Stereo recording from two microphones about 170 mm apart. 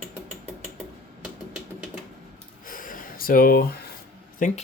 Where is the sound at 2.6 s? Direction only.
55° left (ahead or behind).